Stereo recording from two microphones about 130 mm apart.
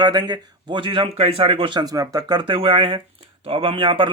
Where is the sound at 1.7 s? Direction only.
30° right (ahead or behind).